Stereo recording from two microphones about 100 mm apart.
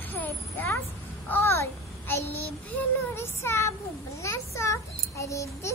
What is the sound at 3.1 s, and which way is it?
Child singing, 25° left (ahead or behind).